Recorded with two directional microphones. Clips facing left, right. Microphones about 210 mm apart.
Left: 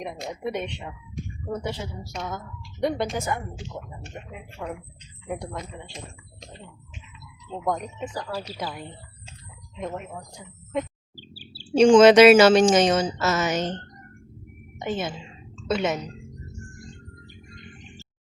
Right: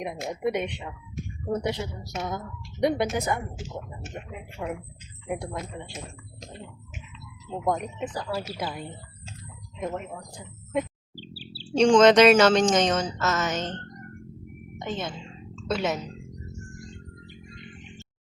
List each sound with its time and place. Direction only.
0.0 s speech: 5° right (ahead or behind)
4.6 s speech: 15° right (ahead or behind)
7.6 s speech: 5° right (ahead or behind)
11.2 s bird: 50° left (ahead or behind)
11.7 s a woman's voice: 5° left (ahead or behind)
14.8 s a woman's voice: 5° left (ahead or behind)
17.2 s a sound: 45° left (ahead or behind)